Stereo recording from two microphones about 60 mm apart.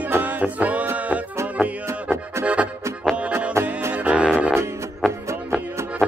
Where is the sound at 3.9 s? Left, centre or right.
Right.